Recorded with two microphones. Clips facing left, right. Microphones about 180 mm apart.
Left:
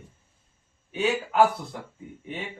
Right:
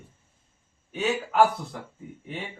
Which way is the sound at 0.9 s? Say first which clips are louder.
Even; centre (ahead or behind).